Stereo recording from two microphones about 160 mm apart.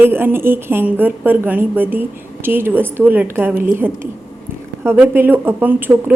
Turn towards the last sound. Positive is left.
turn(degrees=-10)  # may be behind; listen again after turning